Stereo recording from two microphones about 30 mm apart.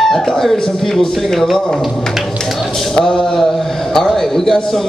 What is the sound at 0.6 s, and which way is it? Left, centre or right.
Speech, centre.